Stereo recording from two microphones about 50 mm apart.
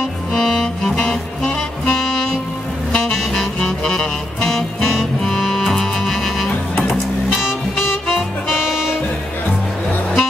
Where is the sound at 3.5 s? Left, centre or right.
Centre.